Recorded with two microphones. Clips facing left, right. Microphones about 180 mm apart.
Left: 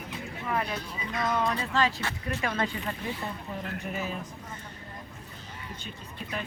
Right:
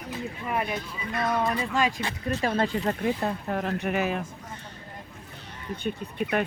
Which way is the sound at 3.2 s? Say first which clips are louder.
Right 8 dB; 75° right (ahead or behind).